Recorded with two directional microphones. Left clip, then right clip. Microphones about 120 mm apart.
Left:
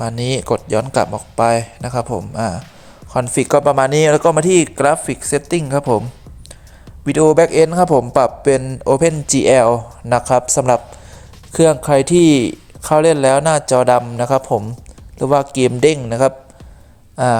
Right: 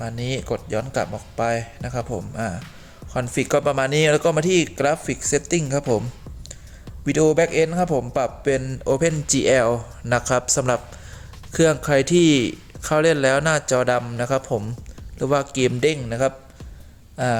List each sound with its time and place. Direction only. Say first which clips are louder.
0.0 s speech: left 8 dB; 60° left (ahead or behind); by 3.6 s 40° left (ahead or behind)
3.6 s speech: left 7 dB; 25° left (ahead or behind)
4.9 s speech: left 6 dB; 10° left (ahead or behind)
7.0 s a man's voice: left 5 dB; 10° left (ahead or behind)
7.3 s speech: left 8 dB; 50° left (ahead or behind)
8.4 s speech: left 8 dB; 35° left (ahead or behind)
8.6 s speech: left 7 dB; 20° left (ahead or behind)
16.0 s speech: left 7 dB; 50° left (ahead or behind)
17.2 s speech: left 8 dB; 35° left (ahead or behind)